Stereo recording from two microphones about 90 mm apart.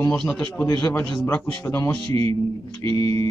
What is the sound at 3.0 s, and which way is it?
Speech, 40° left (ahead or behind).